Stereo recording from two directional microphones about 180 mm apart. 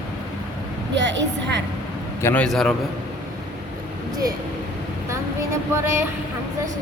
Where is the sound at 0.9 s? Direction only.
80° right.